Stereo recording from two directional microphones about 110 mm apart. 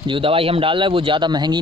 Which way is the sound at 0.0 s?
50° right (ahead or behind).